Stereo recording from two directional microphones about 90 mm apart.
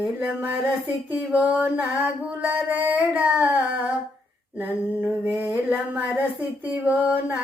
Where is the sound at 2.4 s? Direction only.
15° right (ahead or behind).